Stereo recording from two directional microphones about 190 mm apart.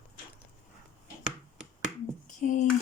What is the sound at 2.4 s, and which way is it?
Speech, 40° left (ahead or behind).